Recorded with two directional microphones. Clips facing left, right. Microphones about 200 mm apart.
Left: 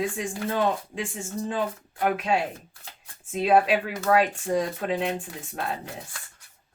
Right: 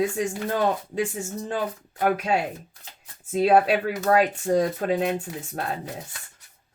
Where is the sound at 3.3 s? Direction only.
40° right (ahead or behind).